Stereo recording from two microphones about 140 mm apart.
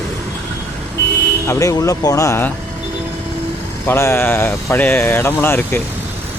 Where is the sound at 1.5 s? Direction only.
20° left (ahead or behind).